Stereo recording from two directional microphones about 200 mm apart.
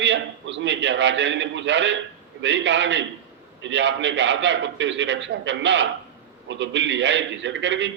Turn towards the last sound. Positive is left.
turn(degrees=-65)  # may be behind; listen again after turning